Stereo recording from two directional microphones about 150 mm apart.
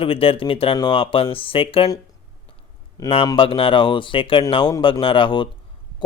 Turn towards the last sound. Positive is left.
turn(degrees=35)  # may be behind; listen again after turning